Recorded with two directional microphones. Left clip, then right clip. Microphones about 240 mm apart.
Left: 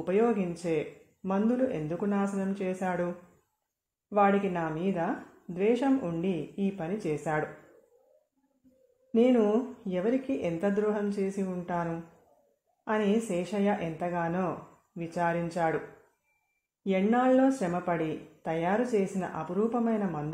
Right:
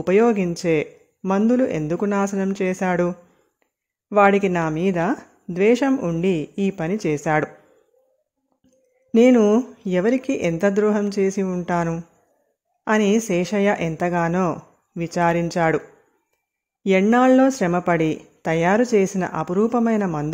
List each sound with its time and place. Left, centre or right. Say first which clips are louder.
0.0 s speech: right 10 dB; right
4.1 s speech: right 10 dB; right
9.1 s speech: right 10 dB; right
16.8 s speech: right 10 dB; right